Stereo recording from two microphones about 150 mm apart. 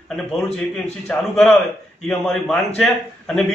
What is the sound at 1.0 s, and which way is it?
A man's voice, 5° left (ahead or behind).